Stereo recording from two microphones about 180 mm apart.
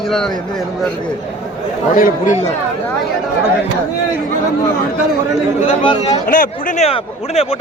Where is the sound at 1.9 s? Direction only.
45° left (ahead or behind).